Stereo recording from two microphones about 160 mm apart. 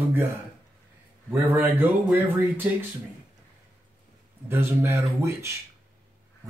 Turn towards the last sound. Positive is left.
turn(degrees=-15)  # may be behind; listen again after turning